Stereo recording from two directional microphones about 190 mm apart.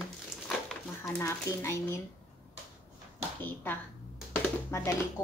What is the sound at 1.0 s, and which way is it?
Speech, 15° left (ahead or behind).